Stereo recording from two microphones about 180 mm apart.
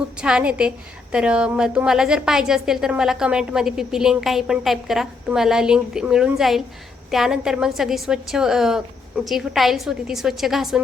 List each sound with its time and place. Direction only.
0.2 s a woman's voice: 5° right (ahead or behind)